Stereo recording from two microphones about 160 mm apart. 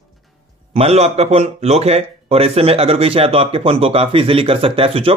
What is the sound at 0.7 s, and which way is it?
Speech, 40° right (ahead or behind).